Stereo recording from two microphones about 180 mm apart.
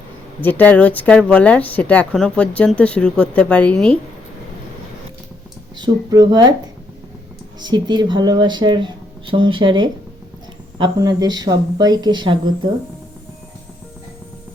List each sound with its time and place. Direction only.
0.4 s speech: 10° left (ahead or behind)
5.8 s speech: 20° right (ahead or behind)
7.6 s speech: 25° right (ahead or behind)